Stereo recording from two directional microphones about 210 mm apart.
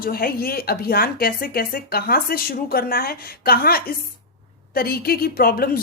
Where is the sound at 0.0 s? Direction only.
45° left (ahead or behind).